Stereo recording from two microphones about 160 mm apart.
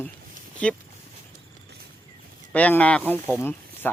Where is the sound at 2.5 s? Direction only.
10° left (ahead or behind).